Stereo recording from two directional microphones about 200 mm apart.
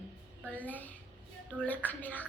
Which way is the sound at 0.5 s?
10° left (ahead or behind).